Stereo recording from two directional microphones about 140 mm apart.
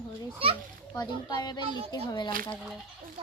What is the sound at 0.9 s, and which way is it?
A child's voice, 30° left (ahead or behind).